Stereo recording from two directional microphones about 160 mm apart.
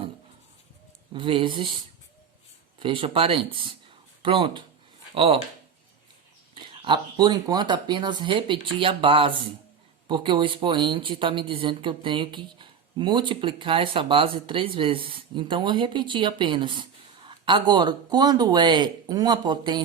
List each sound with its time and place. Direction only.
1.1 s speech: 30° right (ahead or behind)
2.7 s speech: 30° right (ahead or behind)
6.5 s speech: 30° right (ahead or behind)